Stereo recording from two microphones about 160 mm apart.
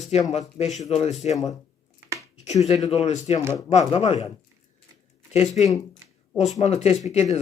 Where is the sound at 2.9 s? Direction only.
40° left (ahead or behind).